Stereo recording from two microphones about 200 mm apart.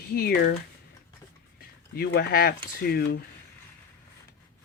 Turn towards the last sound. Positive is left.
turn(degrees=50)  # may be behind; listen again after turning